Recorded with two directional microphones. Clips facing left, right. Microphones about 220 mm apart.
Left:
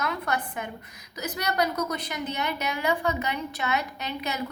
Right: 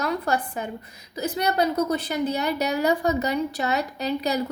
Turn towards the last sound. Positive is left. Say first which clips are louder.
# right 8 dB
turn(degrees=-35)  # may be behind; listen again after turning